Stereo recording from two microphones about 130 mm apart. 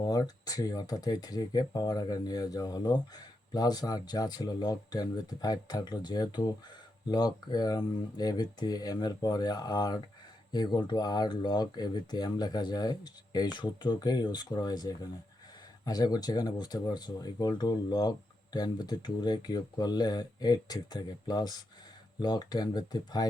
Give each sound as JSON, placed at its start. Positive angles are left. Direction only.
{"t": 0.0, "sound": "speech", "side_deg": 30}